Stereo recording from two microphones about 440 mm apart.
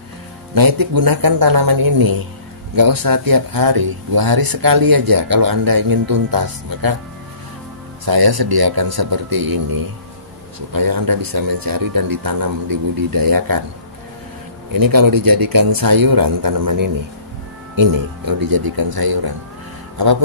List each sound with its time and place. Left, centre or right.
0.6 s speech: right
8.0 s speech: right
14.7 s speech: right